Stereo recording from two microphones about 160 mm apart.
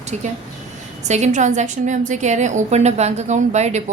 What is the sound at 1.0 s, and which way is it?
A woman's voice, 45° right (ahead or behind).